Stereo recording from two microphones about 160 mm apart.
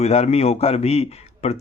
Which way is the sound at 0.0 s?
40° left (ahead or behind).